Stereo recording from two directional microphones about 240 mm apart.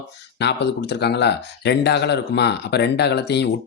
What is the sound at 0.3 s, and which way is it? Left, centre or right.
Speech, left.